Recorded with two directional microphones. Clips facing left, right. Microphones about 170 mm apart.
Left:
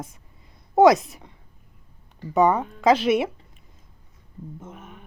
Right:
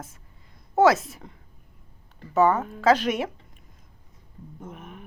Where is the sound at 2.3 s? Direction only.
15° left (ahead or behind).